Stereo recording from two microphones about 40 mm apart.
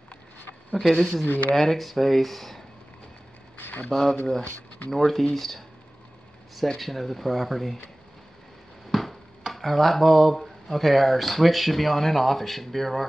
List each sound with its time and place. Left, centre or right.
0.7 s speech: centre
1.2 s speech: left
1.5 s speech: centre
3.9 s speech: centre
6.8 s speech: centre
8.9 s a sound: centre
10.4 s speech: centre